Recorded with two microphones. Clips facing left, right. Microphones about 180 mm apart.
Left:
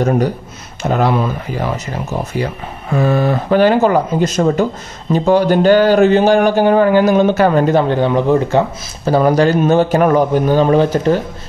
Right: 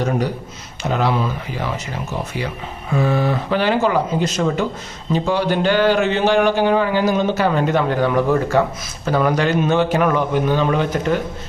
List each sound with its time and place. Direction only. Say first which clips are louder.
0.8 s speech: left 4 dB; 50° left (ahead or behind); by 8.6 s 20° left (ahead or behind)
9.0 s a man's voice: left 6 dB; 35° left (ahead or behind)